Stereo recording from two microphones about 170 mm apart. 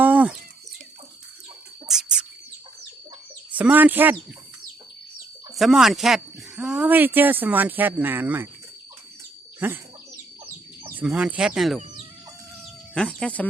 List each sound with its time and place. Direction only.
0.0 s bird: 10° right (ahead or behind)
1.9 s bird: 5° right (ahead or behind)
3.5 s speech: 10° right (ahead or behind)
5.5 s speech: centre (ahead or behind)
9.6 s speech: 10° right (ahead or behind)
10.8 s chicken: 10° right (ahead or behind)
12.9 s chicken: 5° left (ahead or behind)